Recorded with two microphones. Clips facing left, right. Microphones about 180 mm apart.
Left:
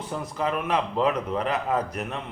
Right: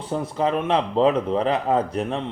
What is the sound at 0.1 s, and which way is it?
Speech, 30° right (ahead or behind).